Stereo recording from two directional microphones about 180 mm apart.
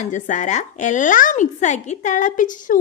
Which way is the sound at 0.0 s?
45° left (ahead or behind).